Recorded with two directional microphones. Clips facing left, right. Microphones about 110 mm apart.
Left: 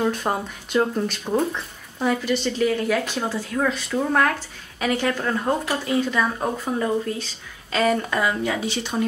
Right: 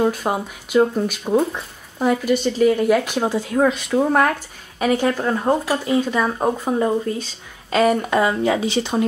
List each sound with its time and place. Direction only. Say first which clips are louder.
0.1 s speech: right 2 dB; 5° right (ahead or behind); by 4.3 s 20° right (ahead or behind)
4.3 s a sound: right 3 dB; 10° right (ahead or behind)
5.0 s speech: right 4 dB; 20° right (ahead or behind)
8.2 s speech: right 5 dB; 25° right (ahead or behind)